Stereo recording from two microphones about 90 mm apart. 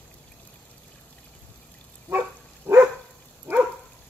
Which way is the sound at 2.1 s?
25° right (ahead or behind).